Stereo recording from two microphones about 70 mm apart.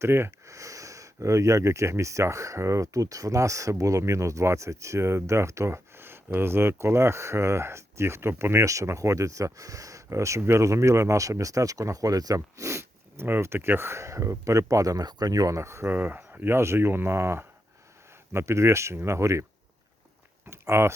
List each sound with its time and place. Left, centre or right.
0.0 s speech: right
15.9 s speech: right
20.5 s speech: right